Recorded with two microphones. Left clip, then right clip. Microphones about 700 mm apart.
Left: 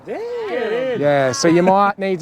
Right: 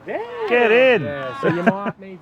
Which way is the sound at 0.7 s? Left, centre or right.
Right.